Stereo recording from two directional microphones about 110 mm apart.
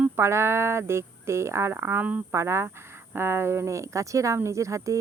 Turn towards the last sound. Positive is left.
turn(degrees=-30)  # may be behind; listen again after turning